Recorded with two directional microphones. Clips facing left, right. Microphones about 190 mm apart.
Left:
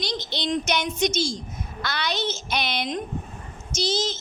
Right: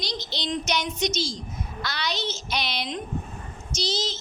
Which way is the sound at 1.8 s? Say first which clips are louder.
Left 3 dB; 55° left (ahead or behind).